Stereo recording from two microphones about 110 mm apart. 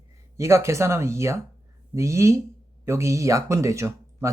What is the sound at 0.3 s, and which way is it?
Speech, 25° right (ahead or behind).